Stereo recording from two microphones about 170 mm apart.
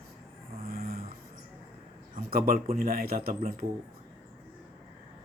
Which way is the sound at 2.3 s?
60° right (ahead or behind).